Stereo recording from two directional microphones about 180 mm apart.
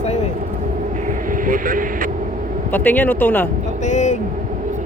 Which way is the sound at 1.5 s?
50° right (ahead or behind).